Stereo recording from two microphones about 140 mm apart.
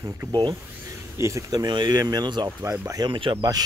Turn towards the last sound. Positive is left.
turn(degrees=-35)  # may be behind; listen again after turning